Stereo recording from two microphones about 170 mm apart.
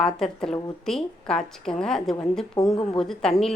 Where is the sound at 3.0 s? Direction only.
5° left (ahead or behind).